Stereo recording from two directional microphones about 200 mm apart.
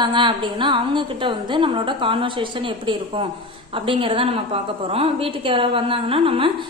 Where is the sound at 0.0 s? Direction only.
25° right (ahead or behind).